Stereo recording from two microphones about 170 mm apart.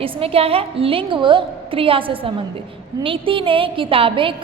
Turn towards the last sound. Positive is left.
turn(degrees=-30)  # may be behind; listen again after turning